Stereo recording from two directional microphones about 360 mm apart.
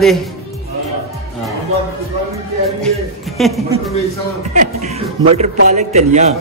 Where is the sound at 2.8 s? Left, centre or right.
Centre.